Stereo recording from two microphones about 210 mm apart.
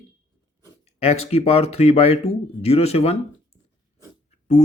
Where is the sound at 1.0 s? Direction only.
30° left (ahead or behind).